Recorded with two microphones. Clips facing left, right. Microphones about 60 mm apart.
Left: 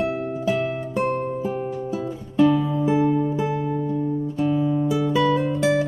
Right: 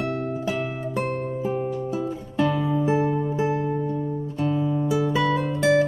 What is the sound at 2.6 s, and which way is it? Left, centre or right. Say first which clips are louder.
Music: left 2 dB; centre.